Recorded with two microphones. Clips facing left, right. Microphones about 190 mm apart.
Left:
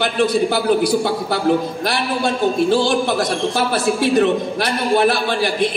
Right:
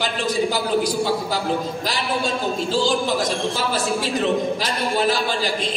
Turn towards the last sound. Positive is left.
turn(degrees=60)  # may be behind; listen again after turning